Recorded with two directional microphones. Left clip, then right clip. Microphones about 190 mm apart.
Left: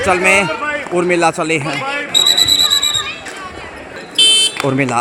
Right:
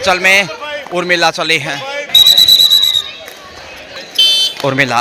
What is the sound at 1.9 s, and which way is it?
Basketball bounce, 45° left (ahead or behind).